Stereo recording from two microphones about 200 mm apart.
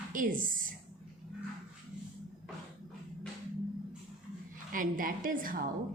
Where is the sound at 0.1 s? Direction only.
40° right (ahead or behind).